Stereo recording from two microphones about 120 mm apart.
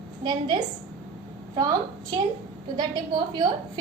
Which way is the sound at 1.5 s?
35° right (ahead or behind).